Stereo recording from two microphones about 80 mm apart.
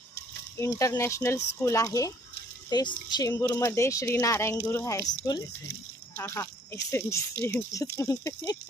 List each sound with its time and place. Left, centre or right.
0.6 s speech: left
2.6 s speech: left
3.3 s speech: left
6.1 s speech: left